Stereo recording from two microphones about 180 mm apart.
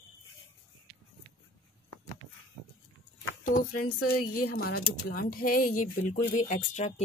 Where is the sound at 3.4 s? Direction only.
50° left (ahead or behind).